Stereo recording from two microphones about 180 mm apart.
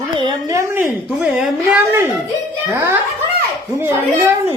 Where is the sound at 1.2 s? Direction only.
5° right (ahead or behind).